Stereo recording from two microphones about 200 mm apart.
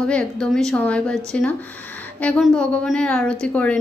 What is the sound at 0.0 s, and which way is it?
Speech, 5° left (ahead or behind).